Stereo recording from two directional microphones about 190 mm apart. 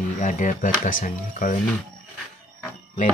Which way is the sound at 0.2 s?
40° left (ahead or behind).